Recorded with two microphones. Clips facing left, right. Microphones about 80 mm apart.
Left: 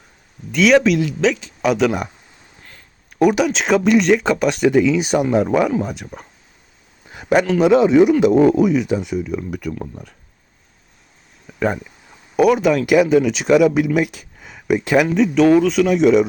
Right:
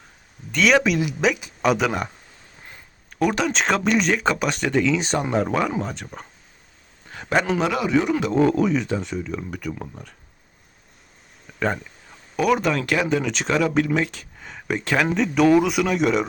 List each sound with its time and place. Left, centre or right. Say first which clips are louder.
0.5 s speech: left 5 dB; centre
3.1 s speech: left 6 dB; centre
7.1 s a sound: left 6 dB; centre
7.6 s speech: left 9 dB; left; by 9.7 s centre
11.6 s speech: left 4 dB; centre
15.6 s speech: left 6 dB; centre
15.9 s speech: left 7 dB; centre